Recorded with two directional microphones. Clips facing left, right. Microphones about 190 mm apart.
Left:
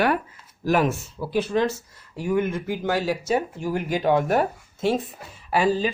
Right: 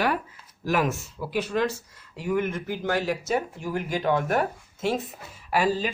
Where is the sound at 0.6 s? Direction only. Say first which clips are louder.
Left 4 dB; 30° left (ahead or behind).